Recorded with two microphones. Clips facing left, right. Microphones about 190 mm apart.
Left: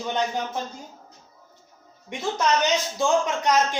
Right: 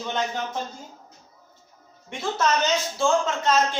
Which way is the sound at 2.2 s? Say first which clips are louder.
Left 1 dB; 15° left (ahead or behind).